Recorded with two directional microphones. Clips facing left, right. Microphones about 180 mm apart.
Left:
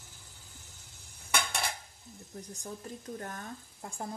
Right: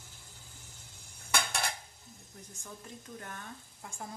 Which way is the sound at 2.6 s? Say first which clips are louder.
Left 4 dB; 40° left (ahead or behind).